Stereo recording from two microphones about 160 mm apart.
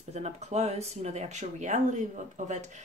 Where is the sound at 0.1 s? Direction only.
45° right (ahead or behind).